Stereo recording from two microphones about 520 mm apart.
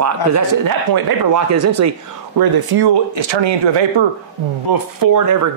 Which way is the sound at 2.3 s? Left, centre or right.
Right.